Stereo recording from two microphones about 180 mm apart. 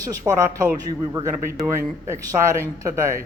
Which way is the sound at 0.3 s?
20° right (ahead or behind).